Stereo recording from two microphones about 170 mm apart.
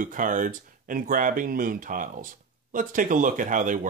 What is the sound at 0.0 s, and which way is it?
Speech, 50° right (ahead or behind).